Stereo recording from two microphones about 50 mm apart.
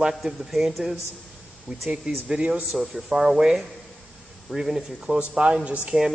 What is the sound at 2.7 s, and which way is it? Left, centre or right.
A man's voice, centre.